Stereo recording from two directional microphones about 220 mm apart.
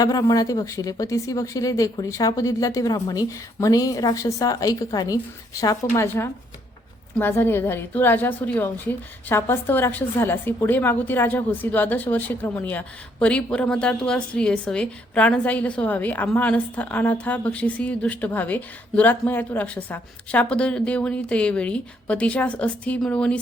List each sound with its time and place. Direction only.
0.0 s a woman's voice: 15° left (ahead or behind)